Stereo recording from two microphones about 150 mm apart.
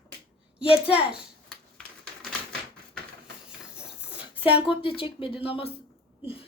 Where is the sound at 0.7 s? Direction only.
10° right (ahead or behind).